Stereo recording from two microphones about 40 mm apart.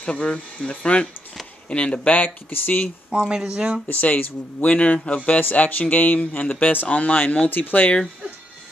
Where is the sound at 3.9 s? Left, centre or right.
Left.